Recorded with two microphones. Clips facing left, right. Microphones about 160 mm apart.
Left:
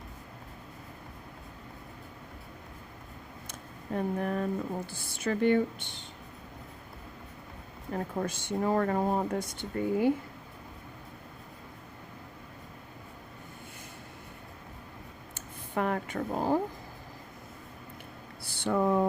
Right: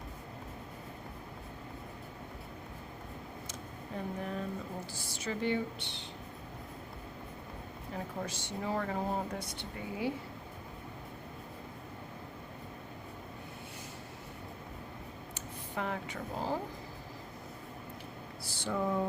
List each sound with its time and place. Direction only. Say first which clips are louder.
3.9 s speech: left 8 dB; 60° left (ahead or behind)
7.9 s speech: left 7 dB; 50° left (ahead or behind)
15.4 s a sound: left 7 dB; 55° left (ahead or behind)
18.4 s speech: left 6 dB; 60° left (ahead or behind)